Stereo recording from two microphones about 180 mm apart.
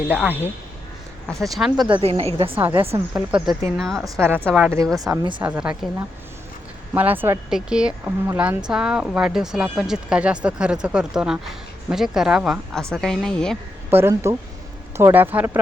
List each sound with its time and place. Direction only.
0.1 s speech: 10° right (ahead or behind)
1.3 s speech: centre (ahead or behind)
1.9 s a woman's voice: 35° right (ahead or behind)
2.6 s speech: 10° right (ahead or behind)
4.0 s speech: 10° right (ahead or behind)
4.9 s speech: 20° right (ahead or behind)
5.4 s speech: 5° right (ahead or behind)
6.9 s speech: 10° right (ahead or behind)
13.9 s speech: 15° right (ahead or behind)